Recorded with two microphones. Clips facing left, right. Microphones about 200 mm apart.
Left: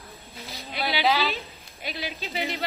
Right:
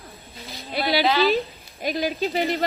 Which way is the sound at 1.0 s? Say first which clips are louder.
Right 3 dB; centre (ahead or behind).